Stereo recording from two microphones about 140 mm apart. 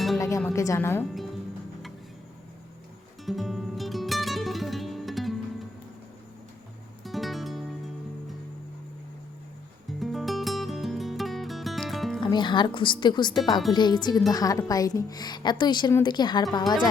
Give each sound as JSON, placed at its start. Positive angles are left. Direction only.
{"t": 0.2, "sound": "music", "side_deg": 20}
{"t": 0.5, "sound": "speech", "side_deg": 25}
{"t": 1.1, "sound": "music", "side_deg": 0}
{"t": 3.2, "sound": "music", "side_deg": 0}
{"t": 7.0, "sound": "music", "side_deg": 0}
{"t": 10.0, "sound": "music", "side_deg": 0}
{"t": 12.2, "sound": "speech", "side_deg": 35}